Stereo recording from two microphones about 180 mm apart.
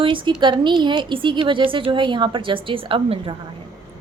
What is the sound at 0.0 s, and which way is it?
A woman's voice, 30° right (ahead or behind).